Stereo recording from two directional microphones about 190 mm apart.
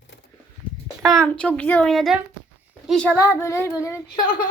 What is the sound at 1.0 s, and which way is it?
A woman's voice, 5° left (ahead or behind).